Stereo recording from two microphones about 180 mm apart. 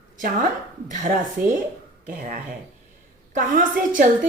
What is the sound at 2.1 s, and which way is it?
Speech, 45° right (ahead or behind).